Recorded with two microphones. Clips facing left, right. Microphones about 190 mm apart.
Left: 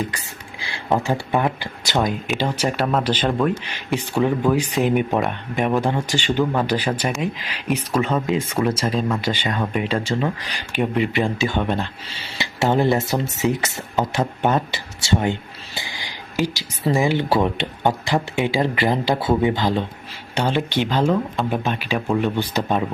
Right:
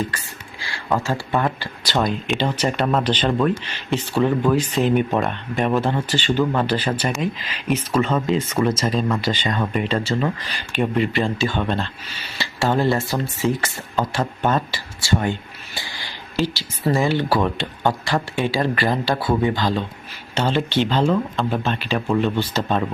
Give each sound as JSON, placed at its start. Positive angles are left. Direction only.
{"t": 0.6, "sound": "speech", "side_deg": 20}